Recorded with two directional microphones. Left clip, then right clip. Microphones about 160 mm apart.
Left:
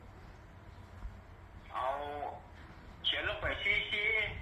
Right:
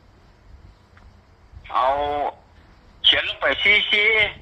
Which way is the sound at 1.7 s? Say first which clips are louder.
Right 17 dB; 90° right.